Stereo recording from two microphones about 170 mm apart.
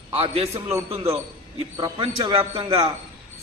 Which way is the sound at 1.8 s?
30° right (ahead or behind).